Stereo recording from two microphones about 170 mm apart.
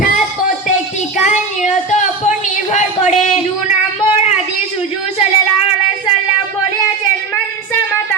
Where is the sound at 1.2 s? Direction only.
45° left (ahead or behind).